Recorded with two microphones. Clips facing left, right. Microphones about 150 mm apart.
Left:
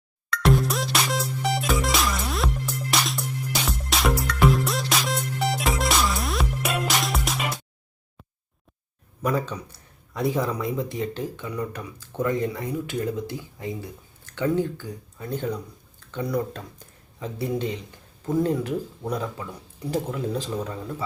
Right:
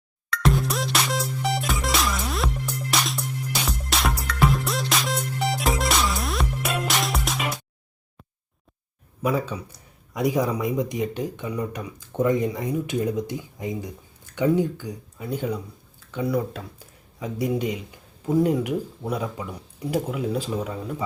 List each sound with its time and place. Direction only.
0.4 s music: centre (ahead or behind)
9.2 s speech: 5° right (ahead or behind)